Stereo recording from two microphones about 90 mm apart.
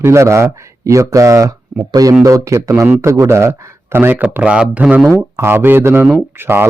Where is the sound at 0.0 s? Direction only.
30° right (ahead or behind); by 5.0 s 15° right (ahead or behind).